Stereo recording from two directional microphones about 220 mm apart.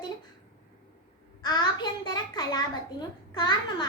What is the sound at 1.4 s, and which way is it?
A child's voice, 20° left (ahead or behind).